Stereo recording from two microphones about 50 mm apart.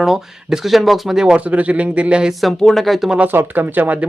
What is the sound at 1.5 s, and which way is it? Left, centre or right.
Speech, right.